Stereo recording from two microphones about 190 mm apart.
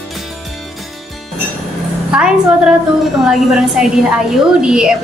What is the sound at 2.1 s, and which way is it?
Speech, 5° right (ahead or behind).